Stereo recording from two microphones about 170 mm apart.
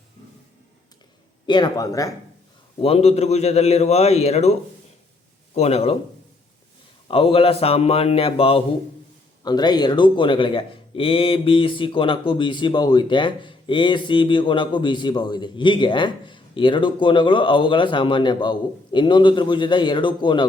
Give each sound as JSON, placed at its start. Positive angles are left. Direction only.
{"t": 1.5, "sound": "speech", "side_deg": 25}
{"t": 2.8, "sound": "a man's voice", "side_deg": 35}
{"t": 5.5, "sound": "a man's voice", "side_deg": 40}
{"t": 7.1, "sound": "a man's voice", "side_deg": 35}